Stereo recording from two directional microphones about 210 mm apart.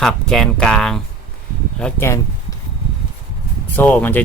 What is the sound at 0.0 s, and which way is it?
Speech, 5° left (ahead or behind).